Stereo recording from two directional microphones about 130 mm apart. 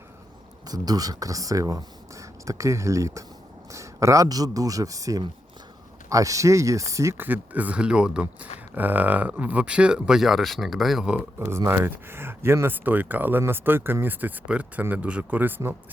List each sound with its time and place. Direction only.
0.7 s speech: 30° right (ahead or behind); by 11.2 s 5° right (ahead or behind)
11.3 s speech: 20° right (ahead or behind)